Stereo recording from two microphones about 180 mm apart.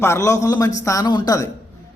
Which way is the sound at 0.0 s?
15° left (ahead or behind).